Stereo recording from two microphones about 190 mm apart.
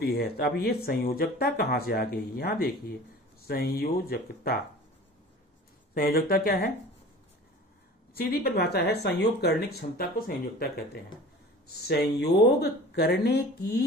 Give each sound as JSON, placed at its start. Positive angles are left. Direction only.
{"t": 0.0, "sound": "speech", "side_deg": 55}
{"t": 5.9, "sound": "speech", "side_deg": 55}
{"t": 8.1, "sound": "speech", "side_deg": 55}